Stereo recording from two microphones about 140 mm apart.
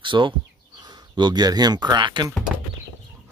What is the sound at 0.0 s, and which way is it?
Speech, 35° right (ahead or behind).